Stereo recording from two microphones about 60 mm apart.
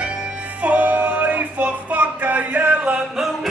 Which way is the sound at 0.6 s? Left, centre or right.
Right.